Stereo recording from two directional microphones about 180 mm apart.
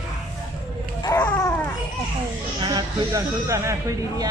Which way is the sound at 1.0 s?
15° left (ahead or behind).